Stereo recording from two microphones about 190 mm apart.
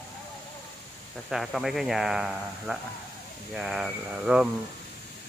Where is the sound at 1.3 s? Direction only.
Centre (ahead or behind).